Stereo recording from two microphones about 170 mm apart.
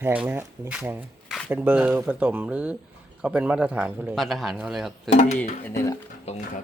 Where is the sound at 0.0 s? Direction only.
10° right (ahead or behind).